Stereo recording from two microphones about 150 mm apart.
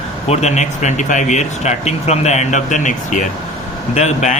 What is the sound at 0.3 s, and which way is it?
Speech, 50° left (ahead or behind).